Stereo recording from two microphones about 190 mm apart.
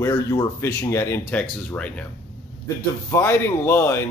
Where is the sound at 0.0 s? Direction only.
20° left (ahead or behind).